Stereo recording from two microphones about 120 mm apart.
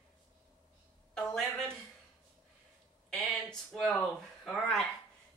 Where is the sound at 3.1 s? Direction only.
5° left (ahead or behind).